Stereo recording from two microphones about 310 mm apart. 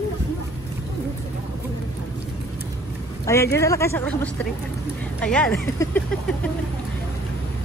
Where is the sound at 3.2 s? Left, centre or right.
Centre.